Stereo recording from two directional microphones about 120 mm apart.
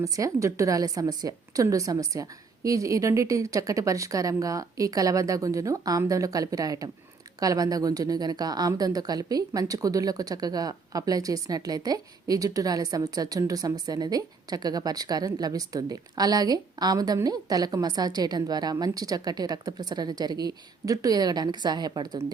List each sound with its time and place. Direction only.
0.0 s a woman's voice: 25° right (ahead or behind)